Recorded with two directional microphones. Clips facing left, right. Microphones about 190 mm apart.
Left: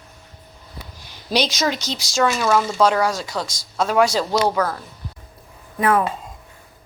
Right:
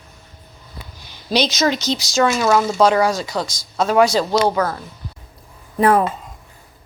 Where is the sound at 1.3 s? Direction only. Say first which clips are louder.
Right 3 dB; centre (ahead or behind).